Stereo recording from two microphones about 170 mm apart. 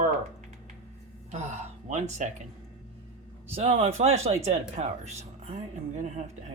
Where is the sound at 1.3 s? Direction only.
45° right (ahead or behind).